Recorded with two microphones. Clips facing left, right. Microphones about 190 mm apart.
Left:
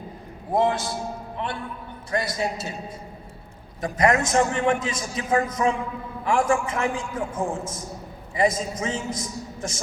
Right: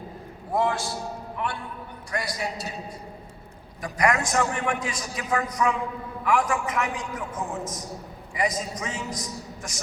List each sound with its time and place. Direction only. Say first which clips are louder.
0.5 s a man's voice: left 3 dB; 20° left (ahead or behind)
3.8 s a man's voice: left 3 dB; 25° left (ahead or behind)